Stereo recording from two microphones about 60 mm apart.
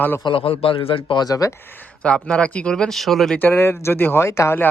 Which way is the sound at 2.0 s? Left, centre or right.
Centre.